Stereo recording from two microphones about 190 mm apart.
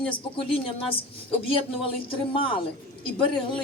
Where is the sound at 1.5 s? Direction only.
30° left (ahead or behind).